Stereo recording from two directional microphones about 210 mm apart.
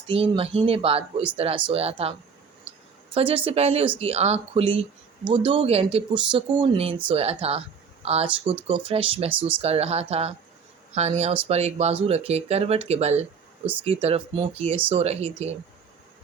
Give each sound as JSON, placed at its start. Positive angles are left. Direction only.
{"t": 0.1, "sound": "speech", "side_deg": -25}
{"t": 3.2, "sound": "speech", "side_deg": -25}
{"t": 11.4, "sound": "speech", "side_deg": -30}